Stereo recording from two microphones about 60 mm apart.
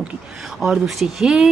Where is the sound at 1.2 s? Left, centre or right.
Centre.